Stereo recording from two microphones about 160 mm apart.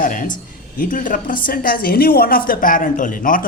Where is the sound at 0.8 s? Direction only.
55° left (ahead or behind).